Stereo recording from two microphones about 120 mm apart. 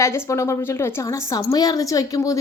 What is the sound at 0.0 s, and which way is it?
Speech, 25° left (ahead or behind).